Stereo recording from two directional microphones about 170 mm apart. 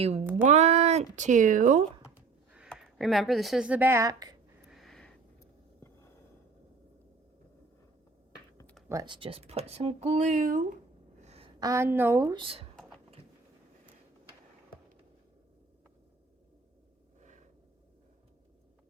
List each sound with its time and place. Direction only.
0.4 s speech: 40° right (ahead or behind)
2.6 s speech: centre (ahead or behind); by 4.4 s 20° right (ahead or behind)
4.7 s a sound: centre (ahead or behind)
8.9 s speech: 25° right (ahead or behind); by 10.7 s 50° right (ahead or behind)
11.2 s a sound: 35° right (ahead or behind)
11.6 s a woman's voice: 15° right (ahead or behind)